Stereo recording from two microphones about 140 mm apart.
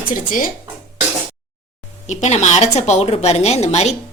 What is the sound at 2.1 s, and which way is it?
A woman's voice, 55° left (ahead or behind).